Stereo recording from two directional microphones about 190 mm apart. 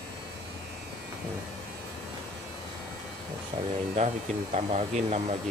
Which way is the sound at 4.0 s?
35° right (ahead or behind).